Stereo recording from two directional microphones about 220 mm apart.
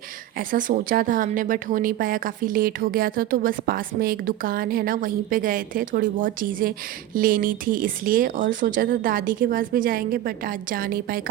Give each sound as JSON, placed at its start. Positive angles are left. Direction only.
{"t": 0.3, "sound": "a woman's voice", "side_deg": -40}